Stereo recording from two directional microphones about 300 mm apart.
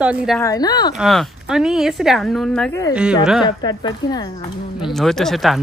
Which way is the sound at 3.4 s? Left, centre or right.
Centre.